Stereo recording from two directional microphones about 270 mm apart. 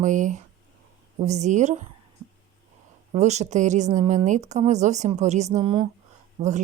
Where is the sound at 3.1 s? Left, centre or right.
Right.